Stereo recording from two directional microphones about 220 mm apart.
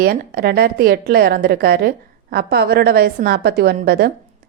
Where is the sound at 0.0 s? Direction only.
45° right (ahead or behind).